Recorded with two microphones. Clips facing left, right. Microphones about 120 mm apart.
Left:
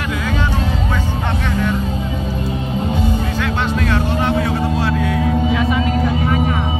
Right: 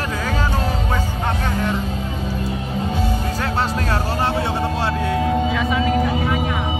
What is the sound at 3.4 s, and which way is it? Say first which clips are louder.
Music: left 2 dB; 35° right (ahead or behind).